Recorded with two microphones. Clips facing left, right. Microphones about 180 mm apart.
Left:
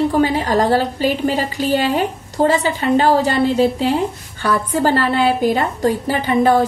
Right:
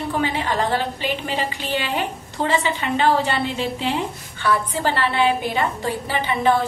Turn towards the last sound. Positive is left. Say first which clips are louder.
# left 5 dB
turn(degrees=45)  # may be behind; listen again after turning